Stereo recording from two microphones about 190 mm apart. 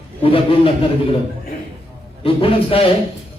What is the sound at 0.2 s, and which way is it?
Speech, 30° left (ahead or behind).